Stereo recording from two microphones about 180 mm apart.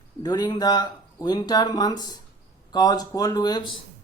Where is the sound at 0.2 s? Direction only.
25° left (ahead or behind).